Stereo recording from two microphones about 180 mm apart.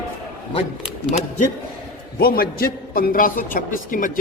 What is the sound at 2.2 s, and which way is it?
A man's voice, 55° left (ahead or behind).